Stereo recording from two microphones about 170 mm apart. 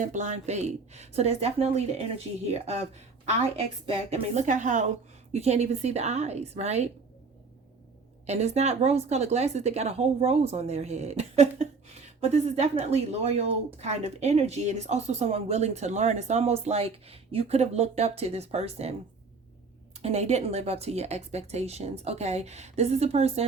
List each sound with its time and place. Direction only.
0.0 s speech: 45° right (ahead or behind)
4.1 s a woman's voice: 40° right (ahead or behind)
8.3 s speech: 40° right (ahead or behind)
20.0 s speech: 40° right (ahead or behind)